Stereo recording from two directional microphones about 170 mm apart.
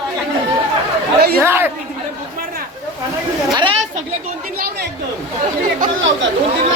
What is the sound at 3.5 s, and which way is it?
Chatter, 25° right (ahead or behind).